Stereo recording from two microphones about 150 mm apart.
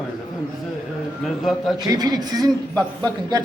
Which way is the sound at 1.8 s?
25° right (ahead or behind).